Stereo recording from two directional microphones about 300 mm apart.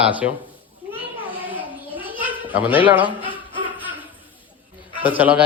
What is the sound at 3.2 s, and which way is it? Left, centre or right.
Music, centre.